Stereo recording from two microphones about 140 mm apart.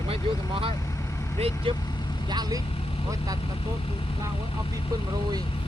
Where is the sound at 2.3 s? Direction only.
30° right (ahead or behind).